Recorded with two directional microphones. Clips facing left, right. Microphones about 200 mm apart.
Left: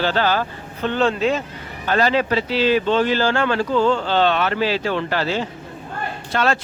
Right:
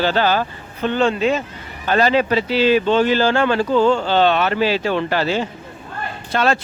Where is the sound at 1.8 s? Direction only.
20° right (ahead or behind).